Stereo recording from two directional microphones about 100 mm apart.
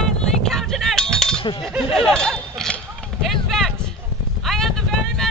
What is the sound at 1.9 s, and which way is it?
Goat, 5° left (ahead or behind).